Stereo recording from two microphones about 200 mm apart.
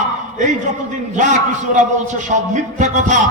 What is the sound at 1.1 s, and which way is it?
A man's voice, 40° right (ahead or behind).